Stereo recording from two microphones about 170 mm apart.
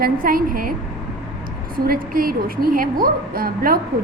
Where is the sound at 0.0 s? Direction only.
55° right (ahead or behind).